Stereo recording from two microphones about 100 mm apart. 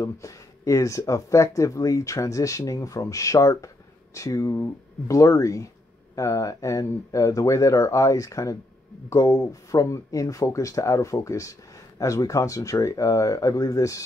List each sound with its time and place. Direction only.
0.0 s speech: 30° left (ahead or behind)